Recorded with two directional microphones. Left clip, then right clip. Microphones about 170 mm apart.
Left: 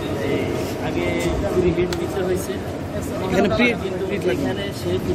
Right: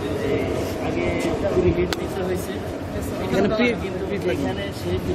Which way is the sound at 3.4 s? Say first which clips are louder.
Left 2 dB; 25° right (ahead or behind).